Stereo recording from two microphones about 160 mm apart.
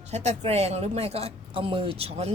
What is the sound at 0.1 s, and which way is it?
Speech, 45° right (ahead or behind).